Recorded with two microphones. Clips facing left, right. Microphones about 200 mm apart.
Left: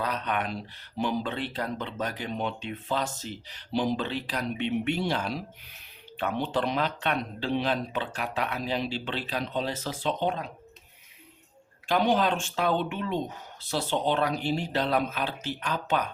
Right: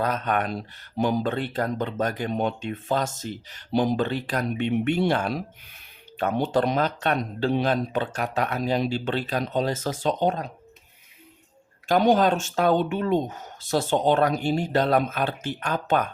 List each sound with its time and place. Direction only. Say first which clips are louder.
0.0 s speech: right 5 dB; 45° right (ahead or behind)
11.9 s speech: right 5 dB; 45° right (ahead or behind)